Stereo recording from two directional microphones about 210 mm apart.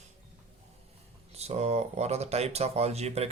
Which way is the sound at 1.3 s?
30° right (ahead or behind).